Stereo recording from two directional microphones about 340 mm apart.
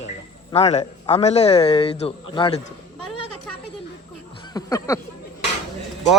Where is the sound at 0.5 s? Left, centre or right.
Centre.